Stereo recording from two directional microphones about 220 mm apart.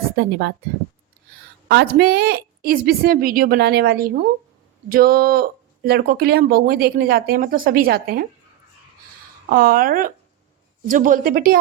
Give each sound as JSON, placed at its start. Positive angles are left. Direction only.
{"t": 0.2, "sound": "speech", "side_deg": -45}
{"t": 1.6, "sound": "speech", "side_deg": -50}
{"t": 9.5, "sound": "a woman's voice", "side_deg": -40}